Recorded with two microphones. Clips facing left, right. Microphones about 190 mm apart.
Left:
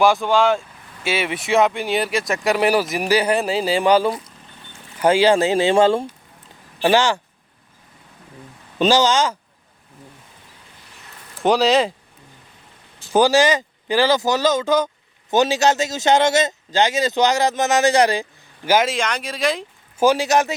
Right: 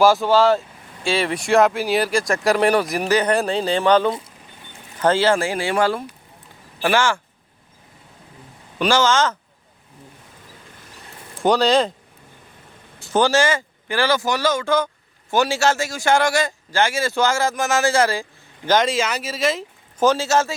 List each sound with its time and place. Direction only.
0.0 s speech: centre (ahead or behind); by 7.2 s 20° left (ahead or behind)
8.8 s speech: 15° left (ahead or behind)
11.4 s speech: 5° left (ahead or behind)
13.0 s a man's voice: 15° left (ahead or behind)
18.9 s speech: 5° right (ahead or behind)
20.0 s speech: 15° left (ahead or behind)